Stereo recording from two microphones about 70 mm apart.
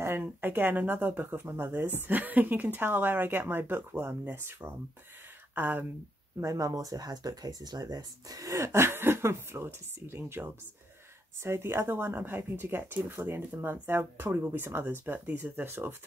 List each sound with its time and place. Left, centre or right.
0.2 s speech: right
6.4 s speech: right